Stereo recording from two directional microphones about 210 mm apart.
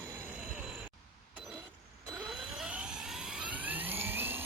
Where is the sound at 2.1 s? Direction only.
Centre (ahead or behind).